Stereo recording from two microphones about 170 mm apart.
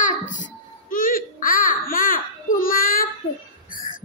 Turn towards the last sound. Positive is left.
turn(degrees=55)  # may be behind; listen again after turning